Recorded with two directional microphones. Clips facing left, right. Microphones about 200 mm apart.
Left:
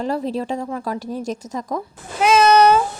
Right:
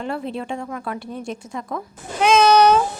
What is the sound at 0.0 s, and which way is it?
Speech, 40° left (ahead or behind).